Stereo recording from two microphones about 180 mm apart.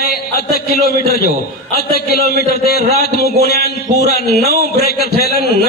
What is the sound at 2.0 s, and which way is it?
A man's voice, 60° left (ahead or behind).